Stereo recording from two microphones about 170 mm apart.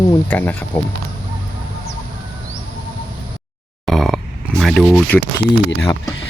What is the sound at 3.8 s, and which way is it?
Burping, centre (ahead or behind).